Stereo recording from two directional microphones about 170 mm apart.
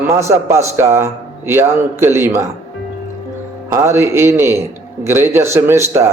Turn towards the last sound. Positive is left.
turn(degrees=-15)  # may be behind; listen again after turning